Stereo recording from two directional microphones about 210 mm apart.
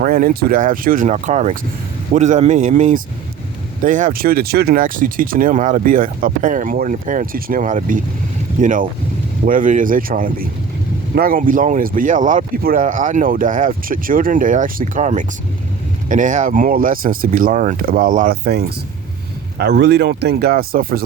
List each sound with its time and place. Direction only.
0.0 s speech: 40° right (ahead or behind)